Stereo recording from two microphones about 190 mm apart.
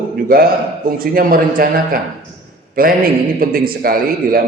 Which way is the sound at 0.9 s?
50° right (ahead or behind).